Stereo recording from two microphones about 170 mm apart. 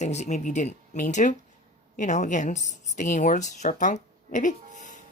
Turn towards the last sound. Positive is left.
turn(degrees=50)  # may be behind; listen again after turning